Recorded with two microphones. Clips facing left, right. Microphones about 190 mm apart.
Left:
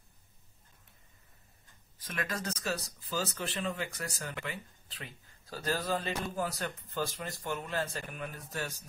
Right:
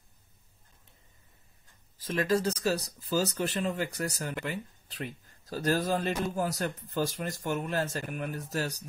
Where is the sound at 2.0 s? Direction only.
30° right (ahead or behind).